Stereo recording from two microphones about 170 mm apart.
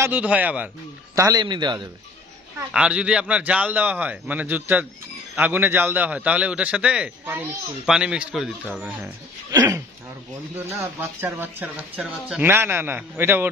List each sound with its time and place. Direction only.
0.0 s a man's voice: 10° right (ahead or behind)
1.1 s a man's voice: 20° right (ahead or behind)
2.7 s a man's voice: 5° right (ahead or behind)
9.5 s a man's voice: 15° right (ahead or behind)